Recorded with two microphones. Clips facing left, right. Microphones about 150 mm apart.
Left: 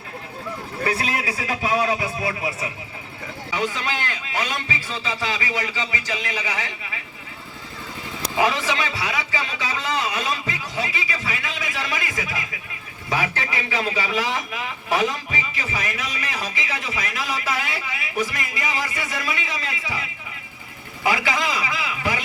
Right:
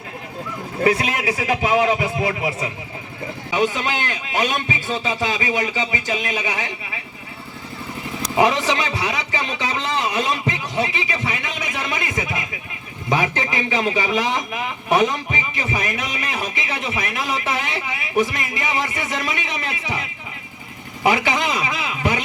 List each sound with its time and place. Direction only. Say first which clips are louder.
0.8 s a man's voice: right 6 dB; 20° right (ahead or behind)
8.4 s a man's voice: right 4 dB; 20° right (ahead or behind)